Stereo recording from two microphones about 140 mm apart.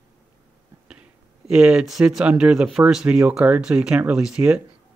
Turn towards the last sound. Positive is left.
turn(degrees=-10)  # may be behind; listen again after turning